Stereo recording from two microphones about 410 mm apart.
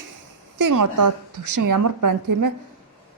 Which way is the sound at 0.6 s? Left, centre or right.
Right.